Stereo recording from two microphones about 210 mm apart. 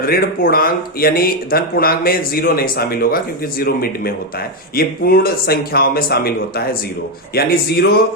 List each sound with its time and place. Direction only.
0.0 s speech: 45° left (ahead or behind)
7.3 s speech: 45° left (ahead or behind)